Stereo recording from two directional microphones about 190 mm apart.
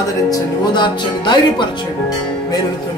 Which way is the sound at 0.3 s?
25° left (ahead or behind).